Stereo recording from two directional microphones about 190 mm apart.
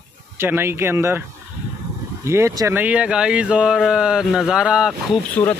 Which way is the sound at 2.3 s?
15° right (ahead or behind).